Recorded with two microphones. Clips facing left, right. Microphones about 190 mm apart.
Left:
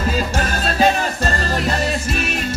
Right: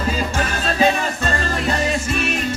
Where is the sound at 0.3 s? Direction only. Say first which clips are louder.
Left 1 dB; 40° left (ahead or behind).